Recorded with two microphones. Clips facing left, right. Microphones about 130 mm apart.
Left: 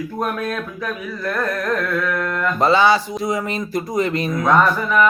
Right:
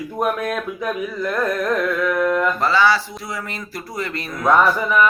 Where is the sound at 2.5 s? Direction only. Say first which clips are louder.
Left 2 dB; 20° left (ahead or behind).